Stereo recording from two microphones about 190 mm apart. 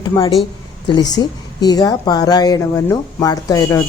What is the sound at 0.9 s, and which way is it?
A woman's voice, 20° left (ahead or behind).